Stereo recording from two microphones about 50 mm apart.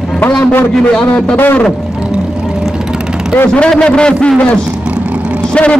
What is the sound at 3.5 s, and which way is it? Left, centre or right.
Speech, centre.